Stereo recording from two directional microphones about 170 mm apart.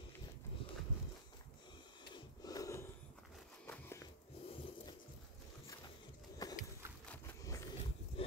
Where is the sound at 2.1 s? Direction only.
20° left (ahead or behind).